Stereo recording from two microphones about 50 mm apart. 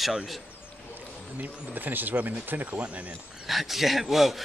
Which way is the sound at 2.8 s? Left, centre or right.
Right.